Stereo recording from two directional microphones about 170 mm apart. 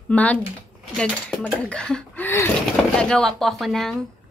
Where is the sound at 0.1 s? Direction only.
10° left (ahead or behind).